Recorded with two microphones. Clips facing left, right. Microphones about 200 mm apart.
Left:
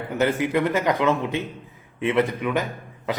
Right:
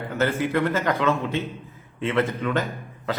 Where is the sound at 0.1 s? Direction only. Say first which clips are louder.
Left 2 dB; 15° left (ahead or behind).